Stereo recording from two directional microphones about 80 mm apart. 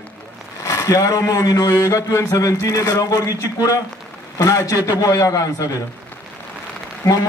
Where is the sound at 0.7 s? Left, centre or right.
Left.